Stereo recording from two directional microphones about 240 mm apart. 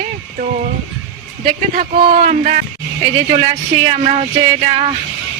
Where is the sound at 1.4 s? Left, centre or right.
Right.